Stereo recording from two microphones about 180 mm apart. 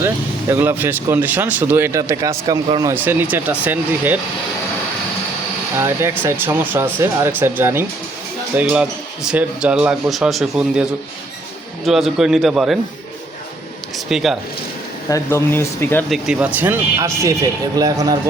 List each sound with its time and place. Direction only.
0.5 s speech: 10° right (ahead or behind)
2.9 s speech: 10° right (ahead or behind)
5.8 s speech: 15° right (ahead or behind)
11.9 s speech: centre (ahead or behind)
14.1 s speech: centre (ahead or behind)
15.1 s speech: 15° left (ahead or behind)
16.0 s speech: centre (ahead or behind)
16.6 s speech: 15° right (ahead or behind)